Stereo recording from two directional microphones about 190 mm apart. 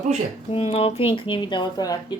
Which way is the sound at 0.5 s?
30° left (ahead or behind).